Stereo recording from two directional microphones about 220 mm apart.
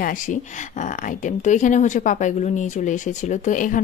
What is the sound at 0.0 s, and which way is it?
Speech, 35° left (ahead or behind).